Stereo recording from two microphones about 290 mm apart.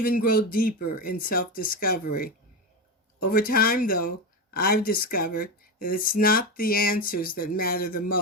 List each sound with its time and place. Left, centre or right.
0.0 s speech: left